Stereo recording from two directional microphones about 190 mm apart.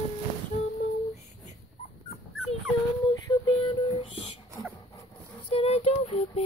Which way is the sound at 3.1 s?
20° left (ahead or behind).